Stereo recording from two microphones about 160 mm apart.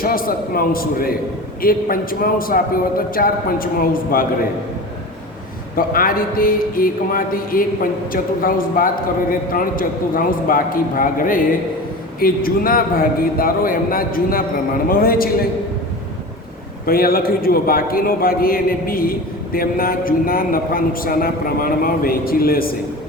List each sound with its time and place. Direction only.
0.0 s speech: 65° left (ahead or behind)
5.7 s a man's voice: 65° left (ahead or behind)
16.8 s a man's voice: 65° left (ahead or behind)